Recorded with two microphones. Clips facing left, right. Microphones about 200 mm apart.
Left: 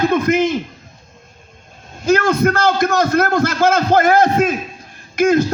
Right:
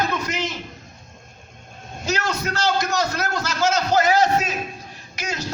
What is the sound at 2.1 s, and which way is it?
A man's voice, 55° left (ahead or behind).